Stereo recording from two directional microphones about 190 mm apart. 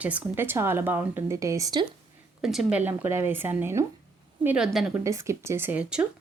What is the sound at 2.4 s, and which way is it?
A woman's voice, centre (ahead or behind).